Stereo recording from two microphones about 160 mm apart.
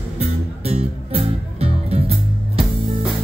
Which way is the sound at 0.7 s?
40° right (ahead or behind).